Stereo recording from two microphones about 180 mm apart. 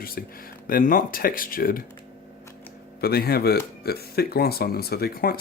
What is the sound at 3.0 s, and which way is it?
Speech, 60° left (ahead or behind).